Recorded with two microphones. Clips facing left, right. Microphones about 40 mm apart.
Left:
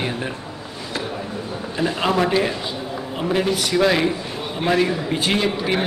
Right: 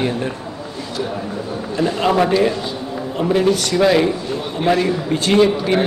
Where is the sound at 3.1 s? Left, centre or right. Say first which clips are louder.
Right 5 dB; centre.